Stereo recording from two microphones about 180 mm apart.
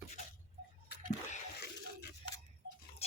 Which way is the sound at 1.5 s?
65° left (ahead or behind).